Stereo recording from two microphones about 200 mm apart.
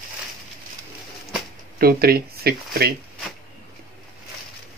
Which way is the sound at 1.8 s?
50° right (ahead or behind).